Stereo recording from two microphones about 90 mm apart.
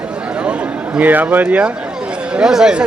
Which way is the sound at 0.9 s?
20° right (ahead or behind).